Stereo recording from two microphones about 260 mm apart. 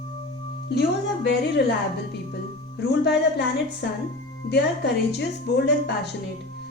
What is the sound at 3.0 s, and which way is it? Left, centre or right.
Speech, left.